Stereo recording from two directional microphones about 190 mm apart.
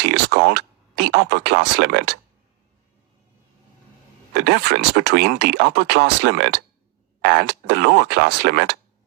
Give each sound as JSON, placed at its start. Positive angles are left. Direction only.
{"t": 0.0, "sound": "speech", "side_deg": -65}
{"t": 4.4, "sound": "speech", "side_deg": -65}